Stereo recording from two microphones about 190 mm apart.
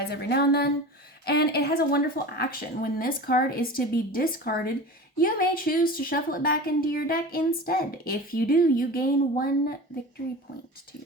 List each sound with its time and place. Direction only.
0.1 s a woman's voice: 60° left (ahead or behind)